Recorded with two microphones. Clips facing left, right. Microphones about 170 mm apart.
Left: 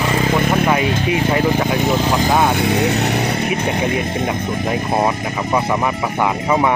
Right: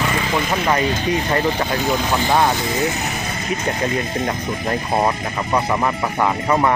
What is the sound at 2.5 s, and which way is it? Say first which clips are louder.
Speech: left 5 dB; 65° left (ahead or behind).